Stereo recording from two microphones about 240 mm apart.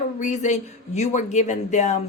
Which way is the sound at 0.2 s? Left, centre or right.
Left.